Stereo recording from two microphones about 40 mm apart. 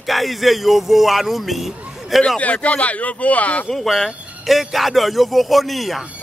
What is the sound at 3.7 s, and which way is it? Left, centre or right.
A man's voice, centre.